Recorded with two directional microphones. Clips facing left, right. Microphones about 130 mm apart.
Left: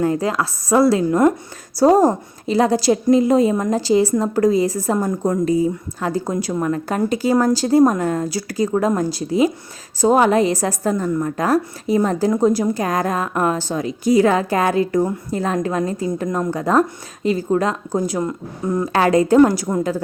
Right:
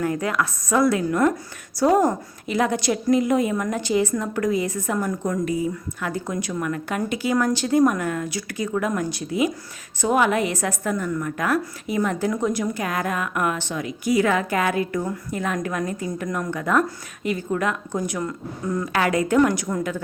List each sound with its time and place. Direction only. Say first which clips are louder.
0.0 s a woman's voice: left 4 dB; 30° left (ahead or behind)